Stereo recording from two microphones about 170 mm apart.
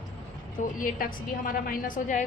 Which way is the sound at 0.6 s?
55° left (ahead or behind).